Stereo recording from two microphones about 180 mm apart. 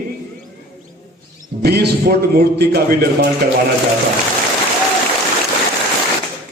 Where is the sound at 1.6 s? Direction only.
60° right (ahead or behind).